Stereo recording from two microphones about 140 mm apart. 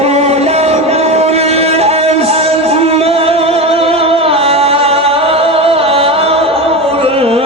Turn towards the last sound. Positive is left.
turn(degrees=-45)  # may be behind; listen again after turning